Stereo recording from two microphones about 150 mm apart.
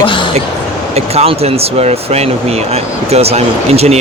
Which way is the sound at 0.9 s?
45° right (ahead or behind).